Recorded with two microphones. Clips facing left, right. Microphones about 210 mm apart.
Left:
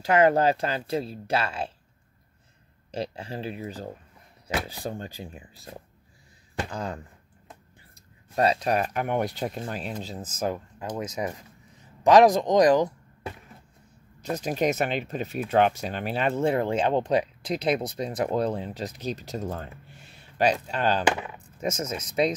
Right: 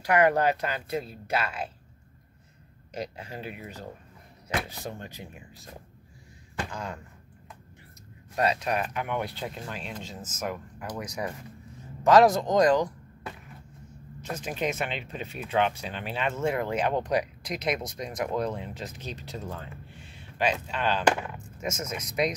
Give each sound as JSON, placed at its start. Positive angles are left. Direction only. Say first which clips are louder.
{"t": 0.0, "sound": "speech", "louder": "left 2 dB", "side_deg": 25}
{"t": 2.9, "sound": "speech", "louder": "left 4 dB", "side_deg": 30}
{"t": 6.7, "sound": "speech", "louder": "left 4 dB", "side_deg": 35}
{"t": 8.4, "sound": "speech", "louder": "left 4 dB", "side_deg": 30}
{"t": 14.3, "sound": "speech", "louder": "left 5 dB", "side_deg": 40}